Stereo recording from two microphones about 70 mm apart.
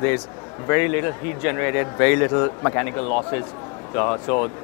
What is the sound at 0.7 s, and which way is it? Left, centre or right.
A man's voice, left.